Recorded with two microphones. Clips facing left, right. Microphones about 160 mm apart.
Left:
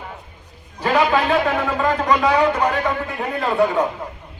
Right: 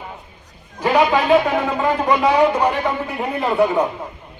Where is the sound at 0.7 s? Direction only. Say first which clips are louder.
Right 2 dB; 15° right (ahead or behind).